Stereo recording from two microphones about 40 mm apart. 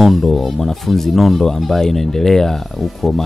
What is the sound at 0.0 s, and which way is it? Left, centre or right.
Speech, centre.